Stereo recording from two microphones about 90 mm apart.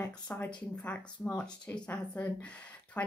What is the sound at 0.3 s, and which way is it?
Speech, 20° left (ahead or behind).